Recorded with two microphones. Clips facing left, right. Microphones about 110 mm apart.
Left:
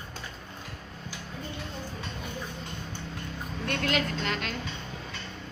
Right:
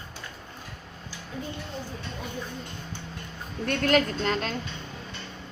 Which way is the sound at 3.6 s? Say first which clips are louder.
Right 6 dB; 45° right (ahead or behind).